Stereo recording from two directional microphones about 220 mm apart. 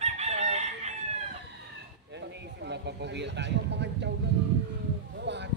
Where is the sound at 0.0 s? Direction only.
30° right (ahead or behind).